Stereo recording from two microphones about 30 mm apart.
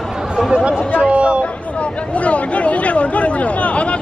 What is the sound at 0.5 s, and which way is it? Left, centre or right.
Speech, right.